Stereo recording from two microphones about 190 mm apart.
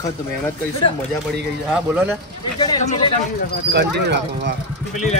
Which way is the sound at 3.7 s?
65° right (ahead or behind).